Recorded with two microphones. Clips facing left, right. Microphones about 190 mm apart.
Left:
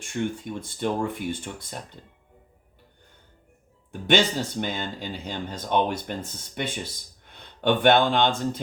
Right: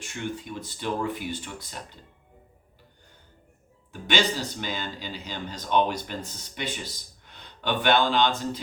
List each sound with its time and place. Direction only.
0.0 s speech: 50° left (ahead or behind)
4.0 s speech: 55° left (ahead or behind)